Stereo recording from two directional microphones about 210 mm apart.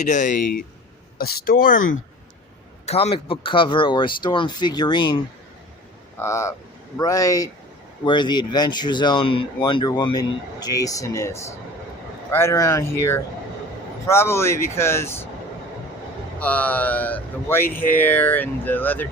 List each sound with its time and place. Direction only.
0.1 s speech: 35° left (ahead or behind)
2.8 s speech: 30° left (ahead or behind); by 15.3 s 10° left (ahead or behind)
16.4 s speech: 5° left (ahead or behind)